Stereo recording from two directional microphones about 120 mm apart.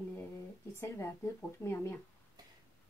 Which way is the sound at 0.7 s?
20° left (ahead or behind).